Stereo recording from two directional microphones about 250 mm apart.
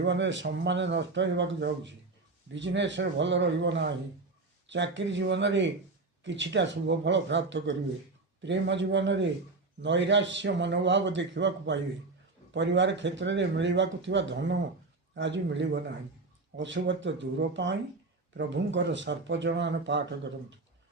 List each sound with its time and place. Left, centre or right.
0.0 s speech: right